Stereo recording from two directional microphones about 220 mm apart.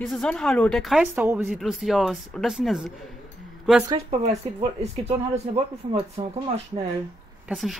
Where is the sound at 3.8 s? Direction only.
15° right (ahead or behind).